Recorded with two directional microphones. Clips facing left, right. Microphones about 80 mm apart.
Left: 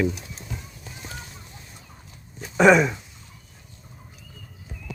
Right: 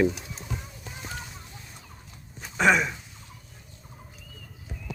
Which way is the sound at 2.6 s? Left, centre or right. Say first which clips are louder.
Left 6 dB; centre.